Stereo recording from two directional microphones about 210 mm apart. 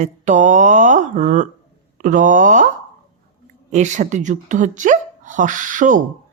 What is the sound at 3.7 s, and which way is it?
A woman's voice, 35° right (ahead or behind).